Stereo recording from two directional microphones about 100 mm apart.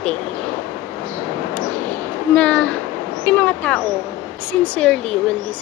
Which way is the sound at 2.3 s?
10° left (ahead or behind).